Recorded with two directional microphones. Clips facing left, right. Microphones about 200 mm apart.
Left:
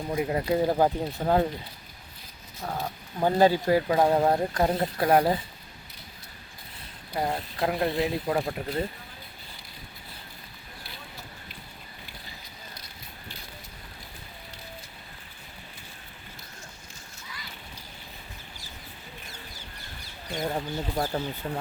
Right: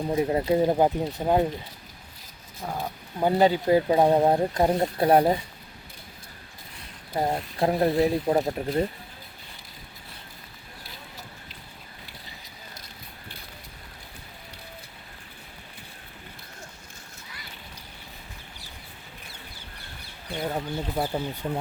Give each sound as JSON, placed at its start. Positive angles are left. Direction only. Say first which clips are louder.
{"t": 0.1, "sound": "speech", "louder": "right 3 dB", "side_deg": -30}
{"t": 2.6, "sound": "speech", "louder": "right 1 dB", "side_deg": -10}
{"t": 7.1, "sound": "speech", "louder": "right 3 dB", "side_deg": -25}
{"t": 20.3, "sound": "speech", "louder": "right 1 dB", "side_deg": -5}